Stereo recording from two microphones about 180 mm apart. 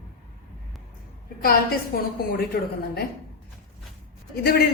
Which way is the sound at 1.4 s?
55° left (ahead or behind).